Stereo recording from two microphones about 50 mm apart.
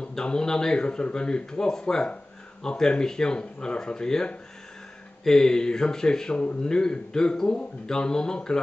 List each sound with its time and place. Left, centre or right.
0.1 s a man's voice: centre